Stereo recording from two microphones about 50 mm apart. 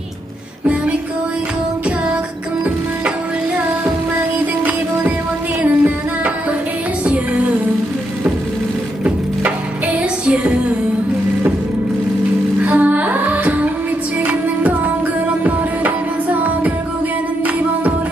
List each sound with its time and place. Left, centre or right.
5.6 s music: right
9.0 s wood: right
10.2 s music: right
12.6 s music: right